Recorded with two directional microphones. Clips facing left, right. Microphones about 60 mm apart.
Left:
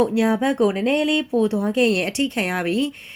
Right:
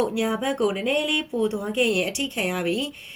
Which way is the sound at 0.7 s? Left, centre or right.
Left.